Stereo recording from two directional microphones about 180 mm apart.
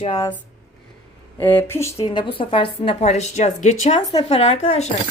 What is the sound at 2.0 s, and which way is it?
A woman's voice, 25° left (ahead or behind).